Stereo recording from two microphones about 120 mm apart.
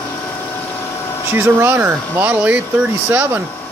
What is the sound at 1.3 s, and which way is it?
Speech, 20° right (ahead or behind).